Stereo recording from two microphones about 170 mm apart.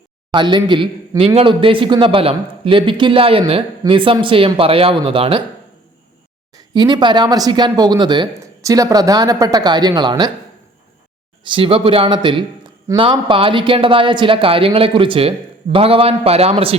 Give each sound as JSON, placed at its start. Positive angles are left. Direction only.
{"t": 0.3, "sound": "a man's voice", "side_deg": -25}
{"t": 6.6, "sound": "speech", "side_deg": -25}
{"t": 11.4, "sound": "a man's voice", "side_deg": -30}